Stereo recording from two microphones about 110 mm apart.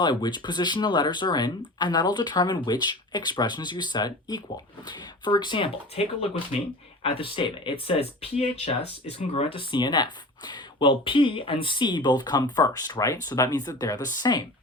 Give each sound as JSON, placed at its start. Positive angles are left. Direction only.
{"t": 0.0, "sound": "speech", "side_deg": 40}
{"t": 6.5, "sound": "speech", "side_deg": 65}
{"t": 9.1, "sound": "speech", "side_deg": 60}